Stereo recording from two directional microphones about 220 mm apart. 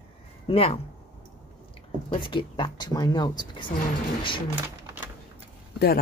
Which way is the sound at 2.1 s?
20° left (ahead or behind).